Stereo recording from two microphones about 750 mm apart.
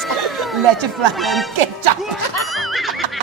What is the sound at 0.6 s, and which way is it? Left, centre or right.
Speech, right.